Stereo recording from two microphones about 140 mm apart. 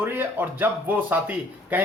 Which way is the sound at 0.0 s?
15° right (ahead or behind).